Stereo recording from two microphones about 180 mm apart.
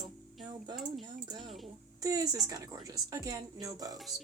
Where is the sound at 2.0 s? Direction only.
20° right (ahead or behind).